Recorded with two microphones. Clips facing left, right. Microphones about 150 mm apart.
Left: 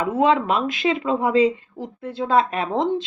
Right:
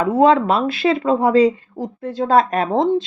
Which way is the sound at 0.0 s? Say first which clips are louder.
Right 5 dB; 35° right (ahead or behind).